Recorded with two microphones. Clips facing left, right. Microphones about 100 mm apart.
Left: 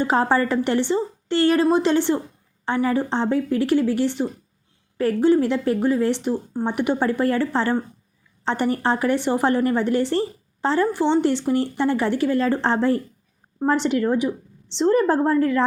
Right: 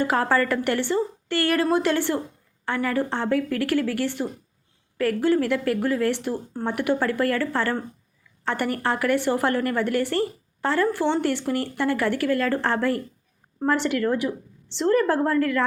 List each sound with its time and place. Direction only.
0.0 s a woman's voice: 20° left (ahead or behind)